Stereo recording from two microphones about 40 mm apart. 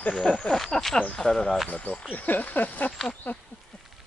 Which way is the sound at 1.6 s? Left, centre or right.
Left.